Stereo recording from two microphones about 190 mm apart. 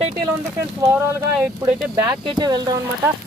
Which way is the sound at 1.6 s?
20° right (ahead or behind).